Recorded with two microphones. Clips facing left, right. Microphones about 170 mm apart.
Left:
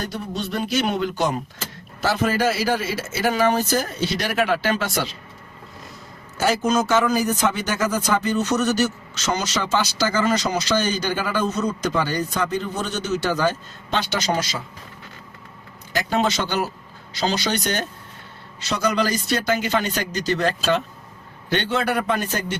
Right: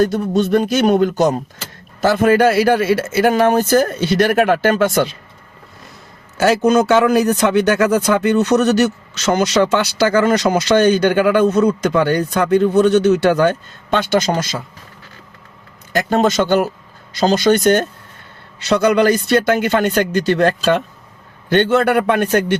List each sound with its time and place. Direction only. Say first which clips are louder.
0.0 s speech: right 13 dB; 50° right (ahead or behind)
2.0 s a man's voice: right 9 dB; 55° right (ahead or behind)
6.3 s a man's voice: right 7 dB; 70° right (ahead or behind); by 14.6 s 50° right (ahead or behind)
15.9 s a man's voice: right 6 dB; 50° right (ahead or behind)